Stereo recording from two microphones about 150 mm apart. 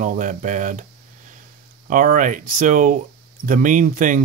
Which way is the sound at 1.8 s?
60° right (ahead or behind).